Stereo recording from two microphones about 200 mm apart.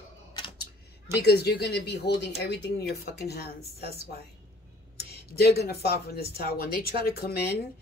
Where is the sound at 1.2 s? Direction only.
55° left (ahead or behind).